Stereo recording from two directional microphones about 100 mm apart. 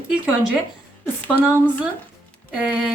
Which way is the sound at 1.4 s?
20° right (ahead or behind).